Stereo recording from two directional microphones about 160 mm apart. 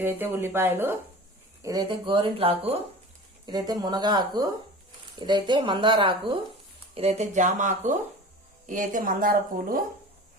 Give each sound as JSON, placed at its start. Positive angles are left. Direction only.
{"t": 0.0, "sound": "speech", "side_deg": -15}
{"t": 1.6, "sound": "a woman's voice", "side_deg": -25}
{"t": 3.4, "sound": "a woman's voice", "side_deg": -25}